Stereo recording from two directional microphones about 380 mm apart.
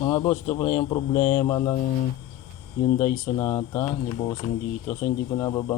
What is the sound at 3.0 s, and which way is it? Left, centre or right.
Speech, centre.